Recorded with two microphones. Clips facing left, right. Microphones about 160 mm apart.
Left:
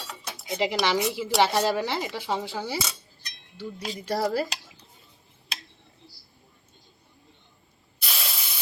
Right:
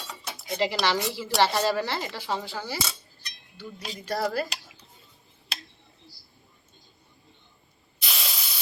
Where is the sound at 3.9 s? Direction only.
25° left (ahead or behind).